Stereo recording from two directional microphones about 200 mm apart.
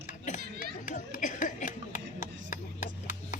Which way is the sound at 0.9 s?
40° left (ahead or behind).